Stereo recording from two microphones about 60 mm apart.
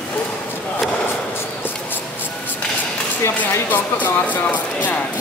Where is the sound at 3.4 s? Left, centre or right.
Left.